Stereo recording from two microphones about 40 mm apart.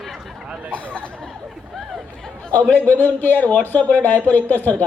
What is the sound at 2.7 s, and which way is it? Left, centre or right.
A man's voice, left.